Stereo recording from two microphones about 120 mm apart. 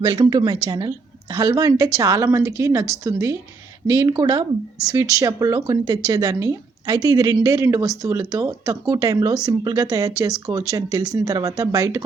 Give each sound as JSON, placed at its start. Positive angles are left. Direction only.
{"t": 0.0, "sound": "a woman's voice", "side_deg": -35}